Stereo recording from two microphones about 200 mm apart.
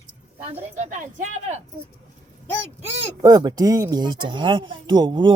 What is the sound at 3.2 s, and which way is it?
Speech, 15° right (ahead or behind).